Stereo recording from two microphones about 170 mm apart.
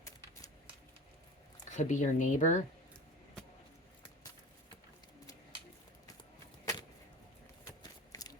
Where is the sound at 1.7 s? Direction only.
45° left (ahead or behind).